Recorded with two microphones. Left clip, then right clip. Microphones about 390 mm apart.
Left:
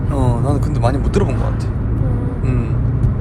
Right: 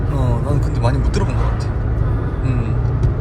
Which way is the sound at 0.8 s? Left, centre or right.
Centre.